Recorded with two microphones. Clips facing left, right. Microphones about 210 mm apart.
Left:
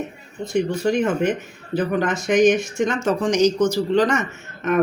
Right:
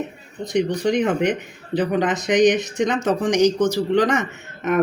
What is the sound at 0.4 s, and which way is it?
Speech, 15° right (ahead or behind).